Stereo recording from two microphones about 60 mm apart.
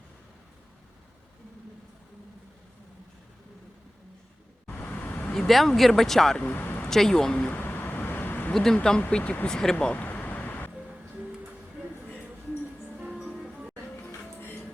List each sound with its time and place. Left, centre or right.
4.7 s vehicle: left
5.3 s speech: centre
6.5 s a sound: left
6.8 s speech: centre
7.3 s a sound: left
8.7 s speech: centre
9.5 s speech: centre
9.7 s vehicle: left
13.0 s music: centre
13.2 s music: centre
14.4 s music: left